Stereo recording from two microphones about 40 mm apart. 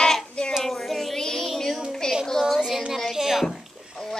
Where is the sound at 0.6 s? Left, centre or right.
Centre.